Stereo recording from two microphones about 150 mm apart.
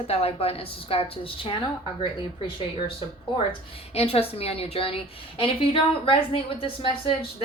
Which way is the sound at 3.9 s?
40° left (ahead or behind).